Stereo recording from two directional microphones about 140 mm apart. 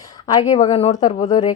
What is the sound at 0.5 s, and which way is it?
Speech, 50° left (ahead or behind).